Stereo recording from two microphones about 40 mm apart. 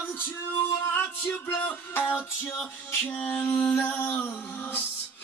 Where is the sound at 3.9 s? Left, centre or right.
Left.